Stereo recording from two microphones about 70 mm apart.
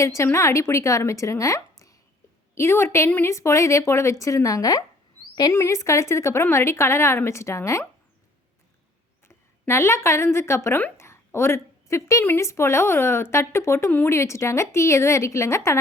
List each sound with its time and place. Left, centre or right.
0.0 s a woman's voice: left
2.6 s a woman's voice: left
5.5 s a woman's voice: left
9.2 s a woman's voice: left
10.9 s a sound: left
12.2 s a woman's voice: left